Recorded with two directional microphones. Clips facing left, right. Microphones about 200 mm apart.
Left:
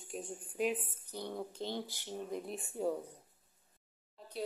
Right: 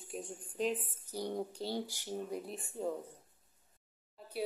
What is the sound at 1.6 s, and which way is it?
Speech, 40° right (ahead or behind).